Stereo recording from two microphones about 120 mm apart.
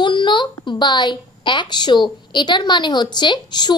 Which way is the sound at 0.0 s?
40° left (ahead or behind).